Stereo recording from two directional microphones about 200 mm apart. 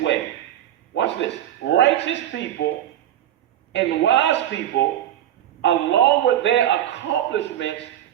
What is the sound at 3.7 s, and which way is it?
Speech, 65° left (ahead or behind).